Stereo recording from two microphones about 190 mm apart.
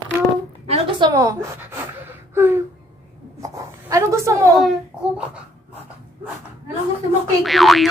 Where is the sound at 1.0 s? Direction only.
20° right (ahead or behind).